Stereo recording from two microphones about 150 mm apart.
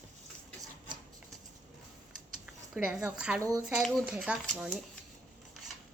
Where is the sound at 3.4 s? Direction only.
25° right (ahead or behind).